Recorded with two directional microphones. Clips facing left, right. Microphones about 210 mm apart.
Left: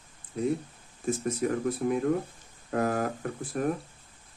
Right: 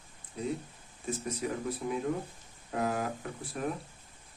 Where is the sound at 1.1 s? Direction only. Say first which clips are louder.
Left 6 dB; 50° left (ahead or behind).